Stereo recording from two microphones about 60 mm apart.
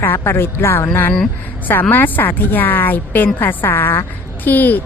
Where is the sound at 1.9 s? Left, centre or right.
Left.